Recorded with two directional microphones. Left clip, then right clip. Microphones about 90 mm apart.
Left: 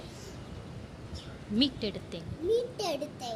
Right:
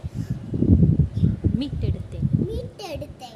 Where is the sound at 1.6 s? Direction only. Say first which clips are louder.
Left 1 dB; 15° right (ahead or behind).